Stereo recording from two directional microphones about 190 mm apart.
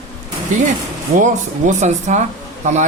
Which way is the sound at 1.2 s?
40° right (ahead or behind).